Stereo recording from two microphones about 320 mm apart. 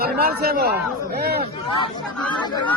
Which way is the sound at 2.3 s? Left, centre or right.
Centre.